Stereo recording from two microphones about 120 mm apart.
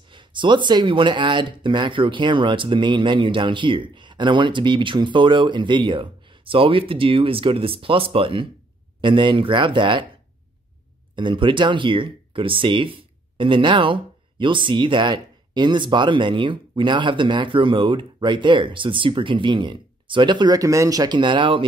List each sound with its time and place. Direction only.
0.1 s speech: 40° right (ahead or behind)
11.1 s speech: 40° right (ahead or behind)